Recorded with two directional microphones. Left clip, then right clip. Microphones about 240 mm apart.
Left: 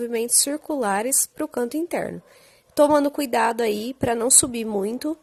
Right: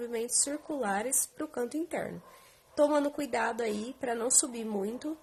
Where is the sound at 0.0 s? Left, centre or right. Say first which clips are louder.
Left 9 dB; left.